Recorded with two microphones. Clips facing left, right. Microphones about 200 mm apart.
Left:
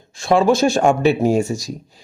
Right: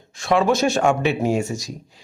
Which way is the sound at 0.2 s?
30° left (ahead or behind).